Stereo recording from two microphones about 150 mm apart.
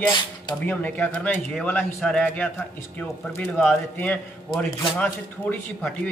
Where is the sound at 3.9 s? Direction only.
10° left (ahead or behind).